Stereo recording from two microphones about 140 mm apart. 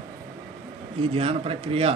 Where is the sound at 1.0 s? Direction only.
45° right (ahead or behind).